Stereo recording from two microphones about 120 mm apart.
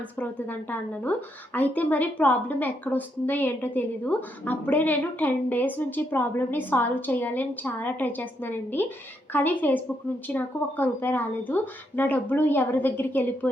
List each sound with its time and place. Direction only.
0.2 s a woman's voice: 15° left (ahead or behind)